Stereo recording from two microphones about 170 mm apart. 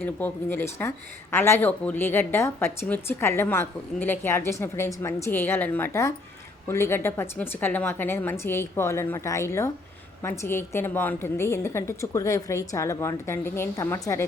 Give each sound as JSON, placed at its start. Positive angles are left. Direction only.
{"t": 0.0, "sound": "speech", "side_deg": 10}